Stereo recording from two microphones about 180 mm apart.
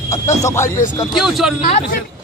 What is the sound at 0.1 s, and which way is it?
Speech, 15° left (ahead or behind).